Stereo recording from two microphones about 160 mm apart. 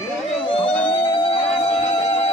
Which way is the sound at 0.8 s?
30° left (ahead or behind).